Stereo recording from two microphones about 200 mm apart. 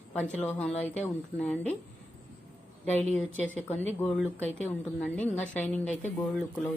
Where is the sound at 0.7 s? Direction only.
35° left (ahead or behind).